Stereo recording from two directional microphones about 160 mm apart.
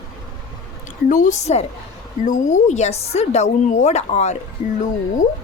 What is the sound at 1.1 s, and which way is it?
A woman's voice, 55° left (ahead or behind).